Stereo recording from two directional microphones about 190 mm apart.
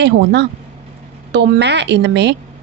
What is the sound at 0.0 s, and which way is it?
A woman's voice, 65° right (ahead or behind).